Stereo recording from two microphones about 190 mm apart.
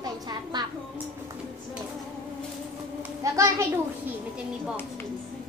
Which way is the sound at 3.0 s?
15° right (ahead or behind).